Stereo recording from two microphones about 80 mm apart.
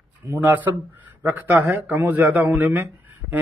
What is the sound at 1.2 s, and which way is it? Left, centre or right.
A man's voice, right.